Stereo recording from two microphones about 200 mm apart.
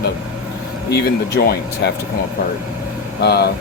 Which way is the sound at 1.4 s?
50° left (ahead or behind).